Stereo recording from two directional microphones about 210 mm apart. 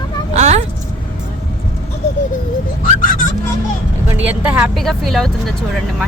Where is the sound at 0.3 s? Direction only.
35° right (ahead or behind).